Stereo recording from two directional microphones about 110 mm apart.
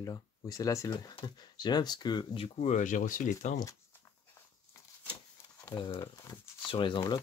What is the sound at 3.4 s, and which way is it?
Speech, 90° left.